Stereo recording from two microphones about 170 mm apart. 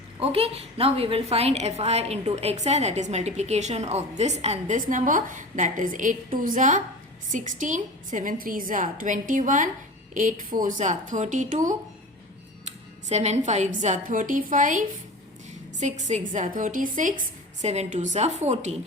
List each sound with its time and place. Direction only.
0.2 s a woman's voice: 35° right (ahead or behind)